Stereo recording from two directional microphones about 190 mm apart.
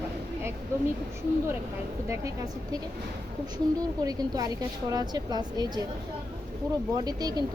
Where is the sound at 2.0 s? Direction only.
15° right (ahead or behind).